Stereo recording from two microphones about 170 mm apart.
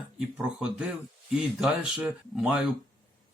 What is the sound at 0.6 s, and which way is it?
A man's voice, 5° right (ahead or behind).